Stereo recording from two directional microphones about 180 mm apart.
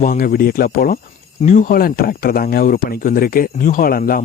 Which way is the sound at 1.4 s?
45° left (ahead or behind).